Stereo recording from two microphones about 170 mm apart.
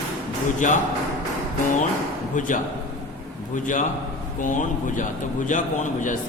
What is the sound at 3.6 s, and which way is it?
Speech, 50° left (ahead or behind).